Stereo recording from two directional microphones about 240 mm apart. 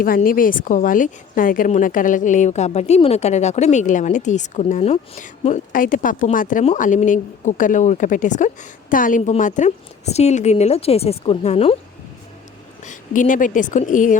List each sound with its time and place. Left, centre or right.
0.0 s a woman's voice: left
12.8 s a woman's voice: left